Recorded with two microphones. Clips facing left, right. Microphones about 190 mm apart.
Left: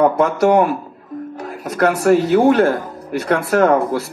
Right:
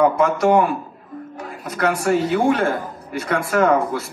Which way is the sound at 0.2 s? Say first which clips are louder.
Left 2 dB; 70° left (ahead or behind).